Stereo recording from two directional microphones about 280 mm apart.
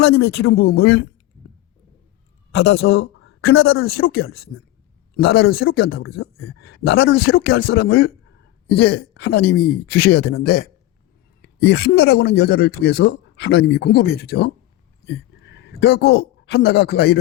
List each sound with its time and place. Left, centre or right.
0.1 s speech: left
2.8 s speech: left
11.4 s speech: left